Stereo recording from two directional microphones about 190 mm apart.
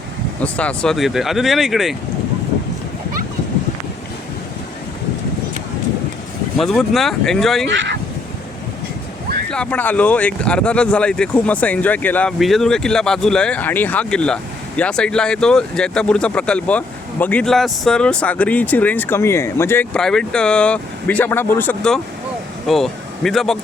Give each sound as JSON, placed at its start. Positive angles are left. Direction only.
{"t": 0.4, "sound": "speech", "side_deg": 5}
{"t": 6.6, "sound": "speech", "side_deg": 0}
{"t": 7.7, "sound": "speech", "side_deg": -70}
{"t": 9.5, "sound": "speech", "side_deg": 5}